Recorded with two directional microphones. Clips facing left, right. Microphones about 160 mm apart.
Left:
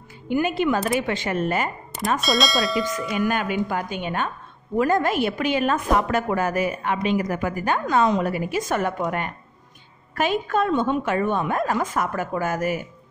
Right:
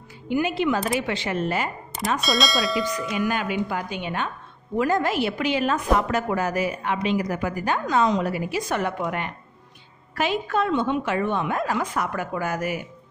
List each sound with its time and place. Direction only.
0.3 s a woman's voice: 50° left (ahead or behind)
2.1 s speech: centre (ahead or behind)
3.2 s a woman's voice: 50° left (ahead or behind)